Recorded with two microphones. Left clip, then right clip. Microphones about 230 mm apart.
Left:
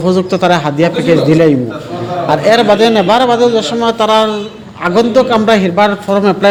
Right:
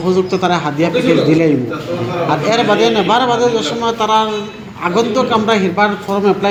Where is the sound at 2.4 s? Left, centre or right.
Left.